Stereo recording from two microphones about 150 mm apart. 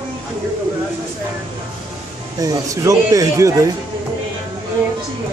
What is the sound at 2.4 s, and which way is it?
Speech, 20° right (ahead or behind).